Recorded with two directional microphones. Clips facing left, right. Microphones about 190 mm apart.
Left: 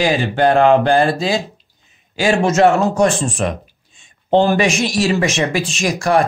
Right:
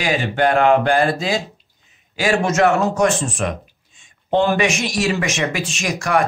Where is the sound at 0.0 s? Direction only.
30° left (ahead or behind).